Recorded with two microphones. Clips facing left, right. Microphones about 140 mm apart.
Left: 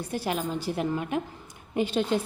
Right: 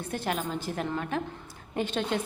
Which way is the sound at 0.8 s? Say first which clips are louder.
Left 3 dB; 15° left (ahead or behind).